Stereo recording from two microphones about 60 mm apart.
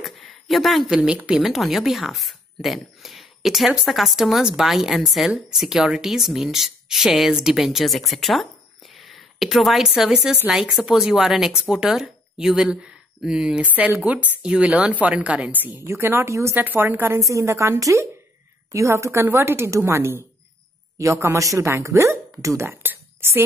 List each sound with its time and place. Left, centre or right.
0.0 s a sound: centre
0.8 s speech: centre
1.4 s speech: centre
10.5 s speech: centre
10.9 s speech: centre
13.7 s speech: right
15.8 s a woman's voice: right
16.5 s a woman's voice: right
17.2 s a woman's voice: right